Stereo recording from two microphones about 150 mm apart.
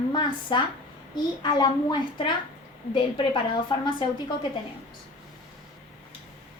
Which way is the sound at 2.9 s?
35° left (ahead or behind).